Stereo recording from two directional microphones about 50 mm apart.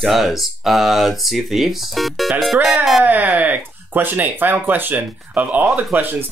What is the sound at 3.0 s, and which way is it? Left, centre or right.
Speech, right.